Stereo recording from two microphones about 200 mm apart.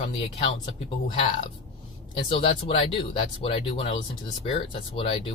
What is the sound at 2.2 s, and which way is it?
Speech, 25° left (ahead or behind).